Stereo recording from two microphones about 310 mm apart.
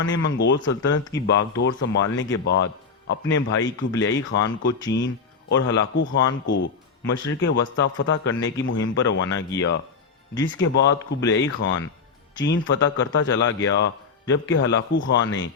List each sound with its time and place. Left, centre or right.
0.0 s a man's voice: left